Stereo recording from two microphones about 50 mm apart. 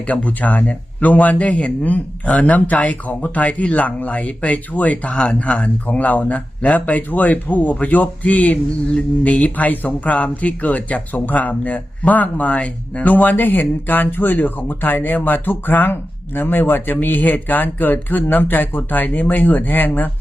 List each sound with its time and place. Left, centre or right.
0.1 s speech: left